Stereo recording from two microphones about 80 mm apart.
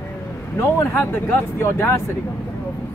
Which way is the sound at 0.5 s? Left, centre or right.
Left.